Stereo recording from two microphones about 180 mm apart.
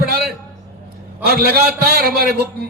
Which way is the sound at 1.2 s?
60° right (ahead or behind).